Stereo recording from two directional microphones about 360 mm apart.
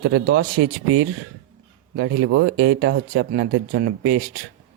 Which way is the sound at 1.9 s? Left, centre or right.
Right.